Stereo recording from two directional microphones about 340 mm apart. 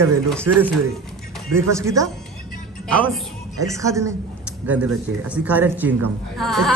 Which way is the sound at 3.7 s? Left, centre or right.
Centre.